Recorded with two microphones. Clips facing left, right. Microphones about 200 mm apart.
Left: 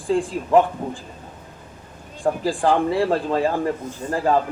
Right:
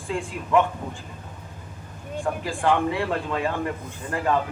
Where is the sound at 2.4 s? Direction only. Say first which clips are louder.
Left 3 dB; 35° left (ahead or behind).